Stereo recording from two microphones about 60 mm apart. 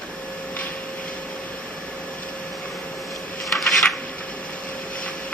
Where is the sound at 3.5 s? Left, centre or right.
Centre.